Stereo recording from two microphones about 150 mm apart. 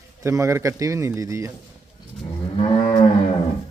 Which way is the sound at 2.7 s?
30° left (ahead or behind).